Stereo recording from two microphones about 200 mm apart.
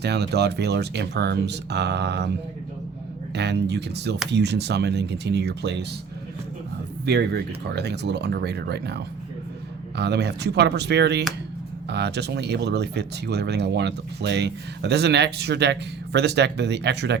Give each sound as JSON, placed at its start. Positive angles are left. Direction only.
{"t": 0.0, "sound": "speech", "side_deg": -55}
{"t": 3.3, "sound": "speech", "side_deg": -55}
{"t": 7.0, "sound": "speech", "side_deg": -55}
{"t": 10.0, "sound": "speech", "side_deg": -55}